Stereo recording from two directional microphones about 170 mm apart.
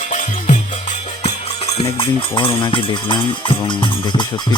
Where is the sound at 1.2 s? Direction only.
40° left (ahead or behind).